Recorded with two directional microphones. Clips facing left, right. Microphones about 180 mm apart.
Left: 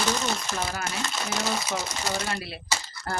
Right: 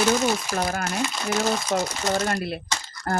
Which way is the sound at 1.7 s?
45° right (ahead or behind).